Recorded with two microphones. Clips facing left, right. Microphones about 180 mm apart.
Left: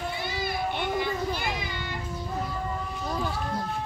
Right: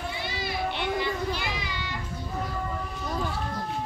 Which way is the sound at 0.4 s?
50° left (ahead or behind).